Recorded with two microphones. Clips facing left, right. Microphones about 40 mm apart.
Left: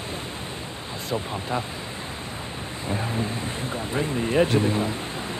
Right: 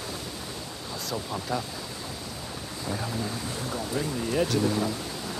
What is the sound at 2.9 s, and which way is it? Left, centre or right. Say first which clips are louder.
Speech: left 4 dB; left.